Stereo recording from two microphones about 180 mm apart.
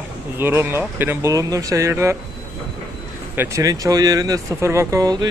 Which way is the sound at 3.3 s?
15° right (ahead or behind).